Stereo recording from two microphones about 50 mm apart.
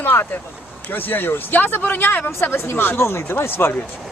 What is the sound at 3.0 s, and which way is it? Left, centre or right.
Speech, left.